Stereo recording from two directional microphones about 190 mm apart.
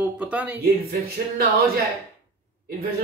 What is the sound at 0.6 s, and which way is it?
Speech, 55° right (ahead or behind).